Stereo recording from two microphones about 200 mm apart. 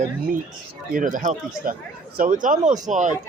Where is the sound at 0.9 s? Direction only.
40° right (ahead or behind).